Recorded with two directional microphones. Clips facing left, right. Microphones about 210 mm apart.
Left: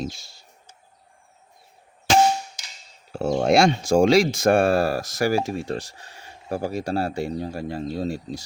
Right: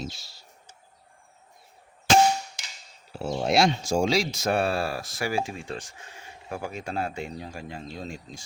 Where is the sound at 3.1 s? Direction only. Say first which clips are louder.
Left 7 dB; 50° left (ahead or behind).